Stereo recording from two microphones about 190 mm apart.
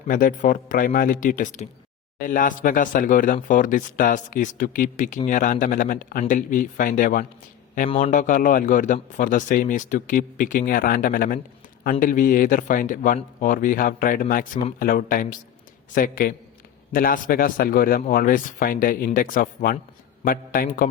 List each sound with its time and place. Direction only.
0.1 s speech: 45° left (ahead or behind)
7.9 s a man's voice: 30° left (ahead or behind)
8.1 s speech: 45° left (ahead or behind)